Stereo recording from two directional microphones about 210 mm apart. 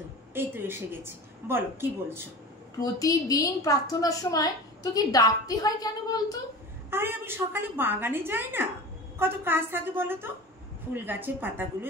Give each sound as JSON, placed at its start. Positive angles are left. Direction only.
{"t": 0.3, "sound": "a woman's voice", "side_deg": -10}
{"t": 2.8, "sound": "a woman's voice", "side_deg": 15}
{"t": 6.9, "sound": "a woman's voice", "side_deg": -10}